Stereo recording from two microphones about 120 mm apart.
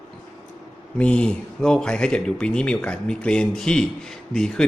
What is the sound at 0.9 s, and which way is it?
A man's voice, 10° left (ahead or behind).